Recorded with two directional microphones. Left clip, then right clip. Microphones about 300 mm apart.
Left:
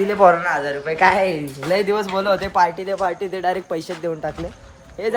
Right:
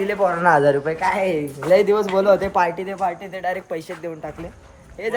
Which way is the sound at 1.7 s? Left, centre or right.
Centre.